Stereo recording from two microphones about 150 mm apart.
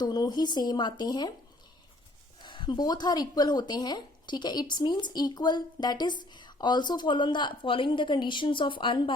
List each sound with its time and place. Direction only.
0.0 s speech: 25° left (ahead or behind)
2.4 s speech: 30° left (ahead or behind)